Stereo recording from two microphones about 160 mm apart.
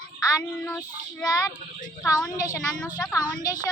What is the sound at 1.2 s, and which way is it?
Speech, 5° left (ahead or behind).